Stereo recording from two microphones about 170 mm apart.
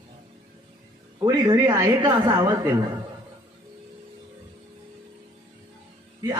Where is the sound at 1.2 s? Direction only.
20° right (ahead or behind).